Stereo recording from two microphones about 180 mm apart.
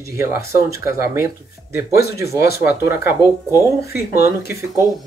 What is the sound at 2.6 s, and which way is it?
Speech, 15° right (ahead or behind).